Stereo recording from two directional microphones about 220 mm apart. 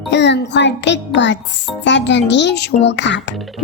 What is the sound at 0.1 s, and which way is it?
A child's voice, 50° left (ahead or behind).